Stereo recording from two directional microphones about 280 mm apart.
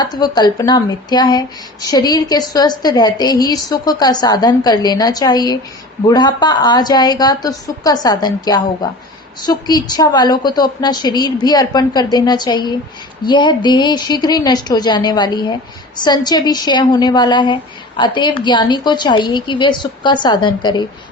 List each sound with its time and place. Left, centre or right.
0.0 s speech: centre